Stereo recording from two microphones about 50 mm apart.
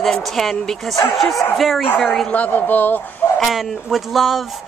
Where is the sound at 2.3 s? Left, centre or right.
Left.